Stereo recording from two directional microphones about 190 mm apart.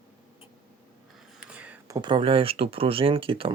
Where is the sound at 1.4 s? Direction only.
5° right (ahead or behind).